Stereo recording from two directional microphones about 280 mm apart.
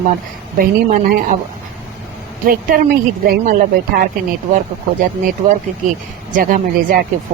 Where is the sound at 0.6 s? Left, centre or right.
Right.